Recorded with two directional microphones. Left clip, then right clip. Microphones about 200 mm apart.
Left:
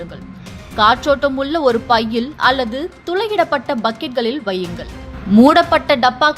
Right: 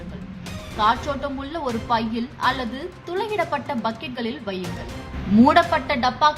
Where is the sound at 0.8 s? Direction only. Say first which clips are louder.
Left 9 dB; 35° left (ahead or behind).